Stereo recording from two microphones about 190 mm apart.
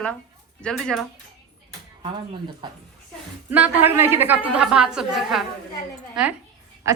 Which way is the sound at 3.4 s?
10° right (ahead or behind).